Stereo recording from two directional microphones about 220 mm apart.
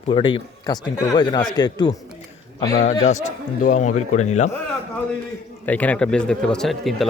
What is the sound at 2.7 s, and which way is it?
A man's voice, 40° left (ahead or behind).